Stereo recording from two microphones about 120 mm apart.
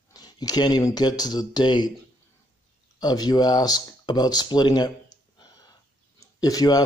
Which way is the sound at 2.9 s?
35° left (ahead or behind).